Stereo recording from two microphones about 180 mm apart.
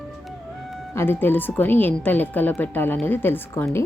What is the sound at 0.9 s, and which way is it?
Speech, 10° left (ahead or behind).